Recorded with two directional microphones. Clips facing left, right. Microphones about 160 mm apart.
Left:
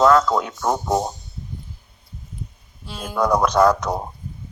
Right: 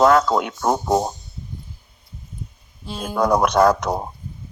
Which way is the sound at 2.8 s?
20° right (ahead or behind).